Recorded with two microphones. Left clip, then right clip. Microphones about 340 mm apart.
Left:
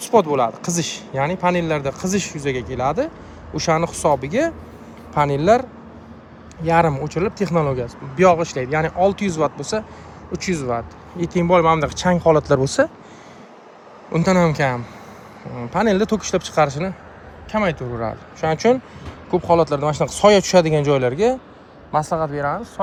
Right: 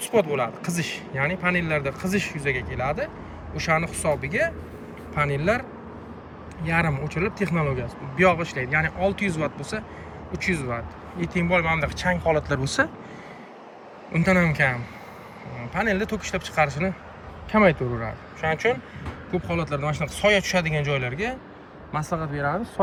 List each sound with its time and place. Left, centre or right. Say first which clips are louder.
0.3 s a man's voice: left 7 dB; centre
6.7 s a man's voice: left 8 dB; centre
14.1 s a man's voice: left 5 dB; centre
18.3 s a man's voice: left 6 dB; centre
22.4 s a man's voice: left 4 dB; centre